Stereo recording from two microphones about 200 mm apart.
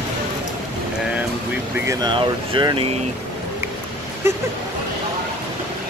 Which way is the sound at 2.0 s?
25° right (ahead or behind).